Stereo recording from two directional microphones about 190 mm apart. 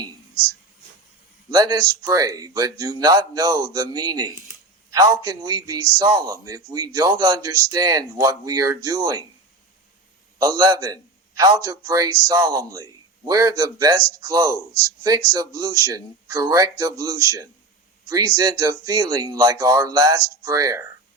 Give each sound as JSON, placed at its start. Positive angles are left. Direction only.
{"t": 1.5, "sound": "speech", "side_deg": -20}
{"t": 10.3, "sound": "speech", "side_deg": -20}